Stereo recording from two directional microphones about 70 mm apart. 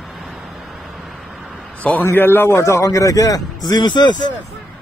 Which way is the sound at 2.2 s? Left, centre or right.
Left.